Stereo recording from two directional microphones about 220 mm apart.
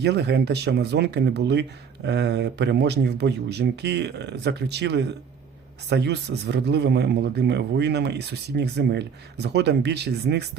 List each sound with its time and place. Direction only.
0.0 s speech: 50° right (ahead or behind)